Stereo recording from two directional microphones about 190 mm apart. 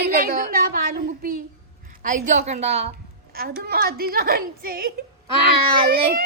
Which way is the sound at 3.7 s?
55° right (ahead or behind).